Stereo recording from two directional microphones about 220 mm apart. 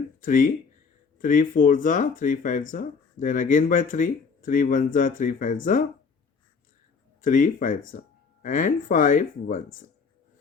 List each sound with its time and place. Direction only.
0.2 s speech: 40° left (ahead or behind)
7.2 s speech: 35° left (ahead or behind)